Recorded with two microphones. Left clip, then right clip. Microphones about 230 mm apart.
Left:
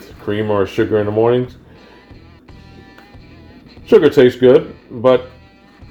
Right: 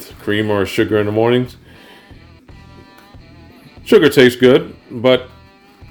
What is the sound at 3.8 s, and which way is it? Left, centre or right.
Speech, right.